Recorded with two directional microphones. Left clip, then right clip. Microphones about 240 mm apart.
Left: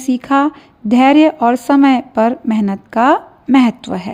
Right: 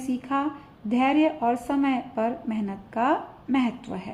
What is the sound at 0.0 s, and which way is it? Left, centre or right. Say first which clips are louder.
Speech: left 13 dB; left.